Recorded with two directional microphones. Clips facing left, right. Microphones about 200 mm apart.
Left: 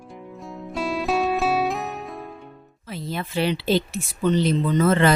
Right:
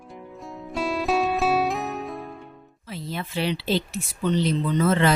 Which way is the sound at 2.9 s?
50° left (ahead or behind).